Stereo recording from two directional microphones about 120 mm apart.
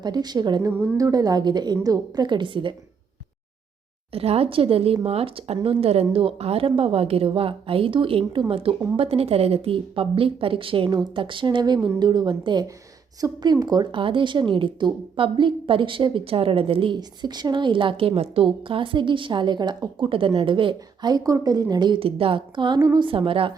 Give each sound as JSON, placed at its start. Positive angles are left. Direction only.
{"t": 0.0, "sound": "a woman's voice", "side_deg": -35}
{"t": 4.1, "sound": "a woman's voice", "side_deg": -55}
{"t": 17.0, "sound": "a woman's voice", "side_deg": -35}
{"t": 23.0, "sound": "speech", "side_deg": -45}